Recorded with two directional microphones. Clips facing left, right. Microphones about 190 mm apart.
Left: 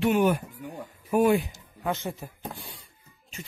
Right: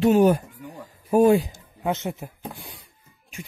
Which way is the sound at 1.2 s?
30° right (ahead or behind).